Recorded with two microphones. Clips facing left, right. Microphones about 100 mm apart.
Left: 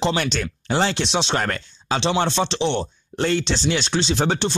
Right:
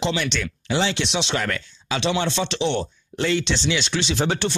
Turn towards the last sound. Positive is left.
turn(degrees=35)  # may be behind; listen again after turning